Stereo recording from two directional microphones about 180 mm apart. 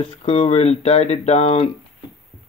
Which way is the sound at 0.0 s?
30° left (ahead or behind).